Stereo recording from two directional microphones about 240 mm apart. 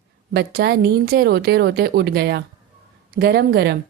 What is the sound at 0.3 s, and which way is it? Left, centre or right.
A woman's voice, right.